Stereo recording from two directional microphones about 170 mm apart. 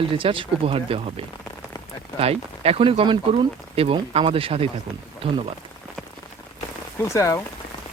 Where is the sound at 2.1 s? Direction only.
35° right (ahead or behind).